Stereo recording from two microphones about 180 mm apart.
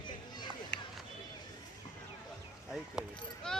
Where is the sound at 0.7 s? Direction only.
75° left (ahead or behind).